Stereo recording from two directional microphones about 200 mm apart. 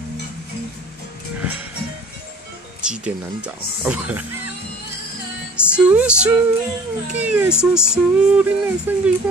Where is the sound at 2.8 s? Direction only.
5° right (ahead or behind).